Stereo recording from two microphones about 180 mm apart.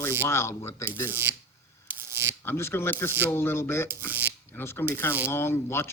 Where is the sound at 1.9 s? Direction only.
15° right (ahead or behind).